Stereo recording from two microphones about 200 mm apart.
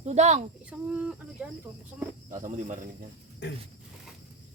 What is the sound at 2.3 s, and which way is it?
Speech, 40° right (ahead or behind).